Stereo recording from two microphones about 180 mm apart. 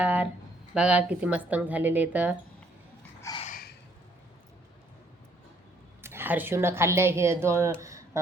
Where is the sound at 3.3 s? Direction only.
20° left (ahead or behind).